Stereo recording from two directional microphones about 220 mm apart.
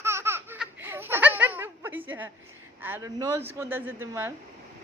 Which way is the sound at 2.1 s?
10° right (ahead or behind).